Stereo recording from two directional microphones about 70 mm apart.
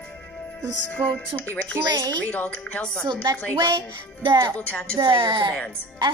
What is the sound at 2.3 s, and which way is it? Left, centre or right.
Speech, left.